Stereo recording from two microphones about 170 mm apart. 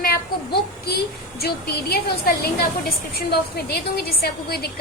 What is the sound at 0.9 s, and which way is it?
A woman's voice, 65° left (ahead or behind).